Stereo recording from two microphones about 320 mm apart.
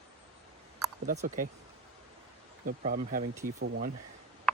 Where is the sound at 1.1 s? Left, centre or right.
Right.